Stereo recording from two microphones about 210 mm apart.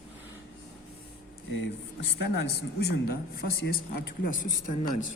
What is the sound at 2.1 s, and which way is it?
A woman's voice, 50° left (ahead or behind).